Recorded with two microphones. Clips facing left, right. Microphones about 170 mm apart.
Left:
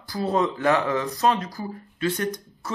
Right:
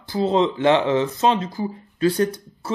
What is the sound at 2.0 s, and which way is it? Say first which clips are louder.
Speech: right 6 dB; 35° right (ahead or behind).